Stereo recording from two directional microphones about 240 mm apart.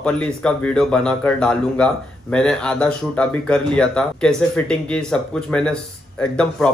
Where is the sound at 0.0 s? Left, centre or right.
Centre.